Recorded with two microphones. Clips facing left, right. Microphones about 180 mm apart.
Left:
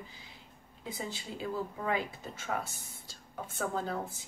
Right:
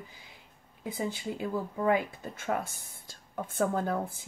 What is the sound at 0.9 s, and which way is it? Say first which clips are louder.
A woman's voice: right 6 dB; 55° right (ahead or behind).